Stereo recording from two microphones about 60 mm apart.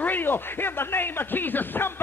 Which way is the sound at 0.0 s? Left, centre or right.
Left.